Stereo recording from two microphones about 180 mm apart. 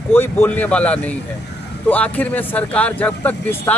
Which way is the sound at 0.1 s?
10° left (ahead or behind).